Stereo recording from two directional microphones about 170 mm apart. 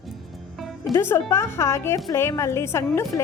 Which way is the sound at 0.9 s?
15° left (ahead or behind).